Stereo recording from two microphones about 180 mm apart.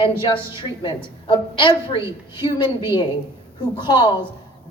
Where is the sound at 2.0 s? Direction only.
15° right (ahead or behind).